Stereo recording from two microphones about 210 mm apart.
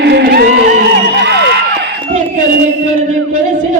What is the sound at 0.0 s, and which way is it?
Music, 50° right (ahead or behind).